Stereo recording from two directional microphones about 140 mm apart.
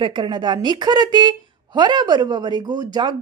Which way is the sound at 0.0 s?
35° right (ahead or behind).